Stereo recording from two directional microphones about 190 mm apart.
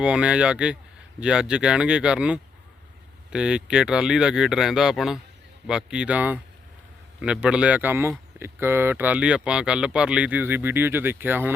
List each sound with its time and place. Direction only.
0.0 s speech: 5° right (ahead or behind)